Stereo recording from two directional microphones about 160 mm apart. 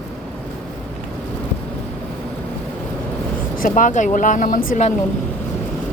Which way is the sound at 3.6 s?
55° left (ahead or behind).